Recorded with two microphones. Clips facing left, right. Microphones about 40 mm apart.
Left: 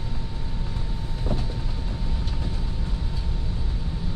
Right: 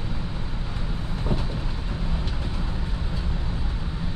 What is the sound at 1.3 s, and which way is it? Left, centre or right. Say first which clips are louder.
Train: right 1 dB; right.